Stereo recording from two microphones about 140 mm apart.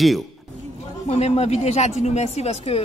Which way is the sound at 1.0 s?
50° left (ahead or behind).